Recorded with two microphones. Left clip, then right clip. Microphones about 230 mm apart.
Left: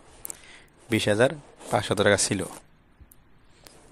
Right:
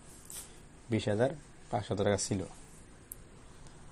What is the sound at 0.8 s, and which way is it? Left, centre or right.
Speech, left.